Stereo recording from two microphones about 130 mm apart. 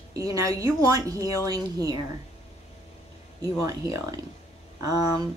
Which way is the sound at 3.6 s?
25° right (ahead or behind).